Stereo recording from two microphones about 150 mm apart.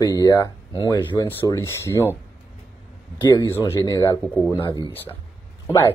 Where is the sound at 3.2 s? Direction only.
30° left (ahead or behind); by 4.6 s 15° left (ahead or behind).